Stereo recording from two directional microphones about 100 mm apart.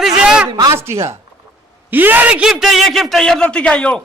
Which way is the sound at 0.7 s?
25° right (ahead or behind).